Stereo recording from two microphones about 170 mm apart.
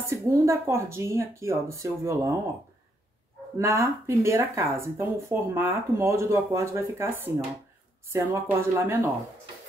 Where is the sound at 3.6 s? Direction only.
15° right (ahead or behind).